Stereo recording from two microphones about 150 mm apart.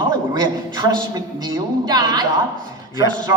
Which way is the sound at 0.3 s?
30° right (ahead or behind).